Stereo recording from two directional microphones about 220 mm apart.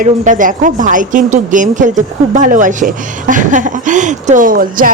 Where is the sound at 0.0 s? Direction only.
35° right (ahead or behind).